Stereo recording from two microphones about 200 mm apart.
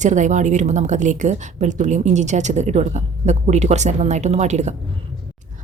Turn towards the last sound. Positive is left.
turn(degrees=-35)  # may be behind; listen again after turning